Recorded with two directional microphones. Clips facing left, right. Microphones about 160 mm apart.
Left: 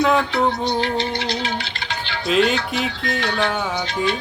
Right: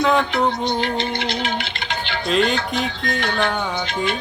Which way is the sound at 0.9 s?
55° right (ahead or behind).